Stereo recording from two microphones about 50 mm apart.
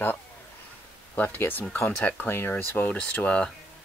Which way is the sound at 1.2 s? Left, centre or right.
Left.